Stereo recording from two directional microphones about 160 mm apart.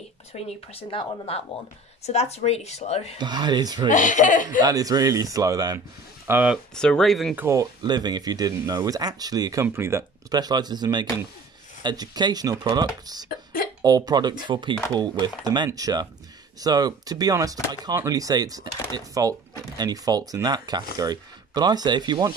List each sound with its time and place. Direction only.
0.3 s speech: 45° left (ahead or behind)
0.7 s speech: 35° left (ahead or behind)
3.2 s speech: 25° right (ahead or behind)
3.9 s speech: 55° left (ahead or behind)
4.6 s speech: 25° right (ahead or behind)
6.2 s speech: 10° right (ahead or behind)
6.7 s speech: 5° left (ahead or behind)
7.3 s speech: 20° right (ahead or behind)